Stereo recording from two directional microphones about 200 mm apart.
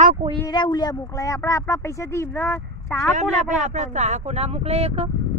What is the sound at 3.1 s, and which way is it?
Speech, 35° right (ahead or behind).